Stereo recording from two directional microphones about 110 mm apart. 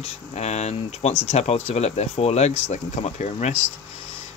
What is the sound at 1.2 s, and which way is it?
Speech, 75° left (ahead or behind).